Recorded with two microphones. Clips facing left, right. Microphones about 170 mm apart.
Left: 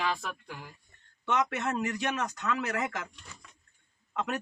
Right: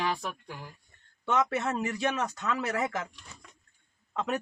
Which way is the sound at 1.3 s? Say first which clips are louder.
Right 2 dB; 30° right (ahead or behind).